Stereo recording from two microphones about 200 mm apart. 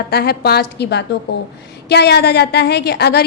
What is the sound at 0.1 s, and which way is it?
A woman's voice, 50° left (ahead or behind).